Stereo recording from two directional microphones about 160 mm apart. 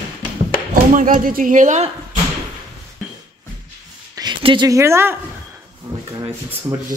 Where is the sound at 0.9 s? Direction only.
55° right (ahead or behind).